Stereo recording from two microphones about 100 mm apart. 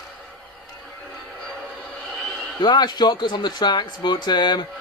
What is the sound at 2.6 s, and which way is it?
Speech, 45° left (ahead or behind).